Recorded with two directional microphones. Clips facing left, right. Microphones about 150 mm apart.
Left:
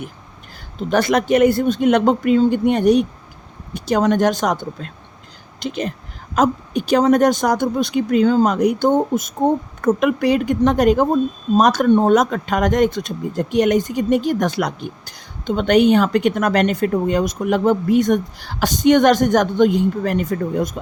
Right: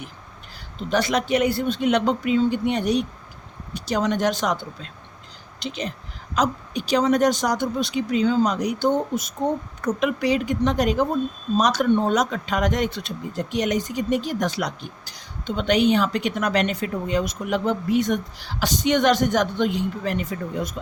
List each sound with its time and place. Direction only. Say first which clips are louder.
0.8 s speech: left 5 dB; 50° left (ahead or behind)